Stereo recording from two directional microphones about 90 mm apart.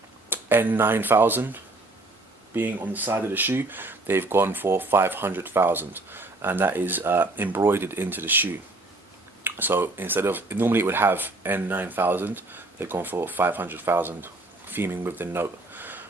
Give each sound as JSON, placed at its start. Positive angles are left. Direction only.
{"t": 0.3, "sound": "speech", "side_deg": -25}